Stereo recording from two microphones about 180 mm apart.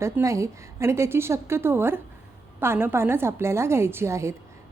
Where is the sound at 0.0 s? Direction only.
15° right (ahead or behind).